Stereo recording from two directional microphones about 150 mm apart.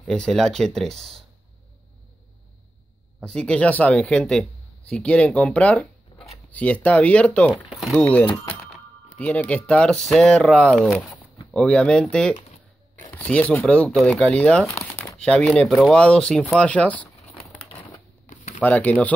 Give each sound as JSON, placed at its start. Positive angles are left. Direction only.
{"t": 0.0, "sound": "speech", "side_deg": 5}
{"t": 3.3, "sound": "speech", "side_deg": 5}
{"t": 14.7, "sound": "crumpling", "side_deg": 20}
{"t": 15.1, "sound": "speech", "side_deg": 5}
{"t": 18.3, "sound": "a sound", "side_deg": 50}
{"t": 18.6, "sound": "speech", "side_deg": 10}